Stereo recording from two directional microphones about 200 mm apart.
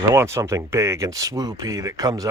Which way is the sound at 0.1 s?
15° right (ahead or behind).